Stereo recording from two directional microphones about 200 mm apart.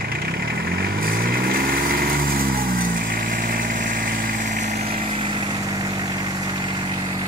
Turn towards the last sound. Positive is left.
turn(degrees=-20)  # may be behind; listen again after turning